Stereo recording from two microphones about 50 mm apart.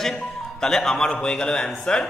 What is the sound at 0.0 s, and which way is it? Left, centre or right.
Music, centre.